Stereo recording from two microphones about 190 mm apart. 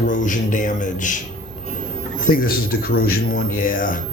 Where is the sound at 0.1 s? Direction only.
45° left (ahead or behind).